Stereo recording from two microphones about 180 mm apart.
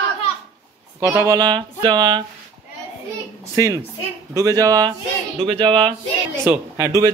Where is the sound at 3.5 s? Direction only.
15° right (ahead or behind).